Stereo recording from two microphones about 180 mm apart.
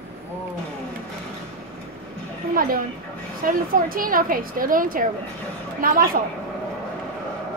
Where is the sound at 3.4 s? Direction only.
50° right (ahead or behind).